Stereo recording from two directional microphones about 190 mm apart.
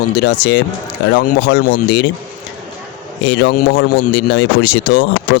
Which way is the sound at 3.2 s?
70° left (ahead or behind).